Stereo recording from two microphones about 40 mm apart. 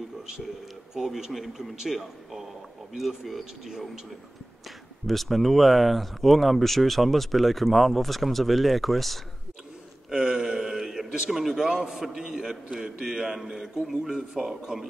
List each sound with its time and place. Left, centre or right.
0.9 s a man's voice: centre
5.0 s speech: centre
10.0 s a sound: right
11.2 s a man's voice: centre